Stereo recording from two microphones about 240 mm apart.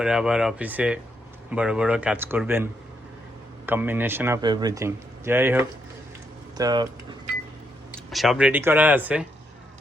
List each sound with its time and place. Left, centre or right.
0.0 s speech: centre
3.7 s speech: centre
7.9 s speech: centre